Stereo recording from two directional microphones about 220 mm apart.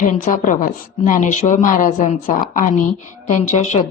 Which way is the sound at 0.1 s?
35° left (ahead or behind).